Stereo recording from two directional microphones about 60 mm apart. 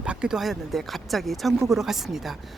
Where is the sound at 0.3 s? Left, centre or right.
Centre.